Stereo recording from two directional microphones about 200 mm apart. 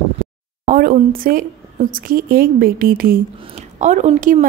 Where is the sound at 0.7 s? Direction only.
45° right (ahead or behind).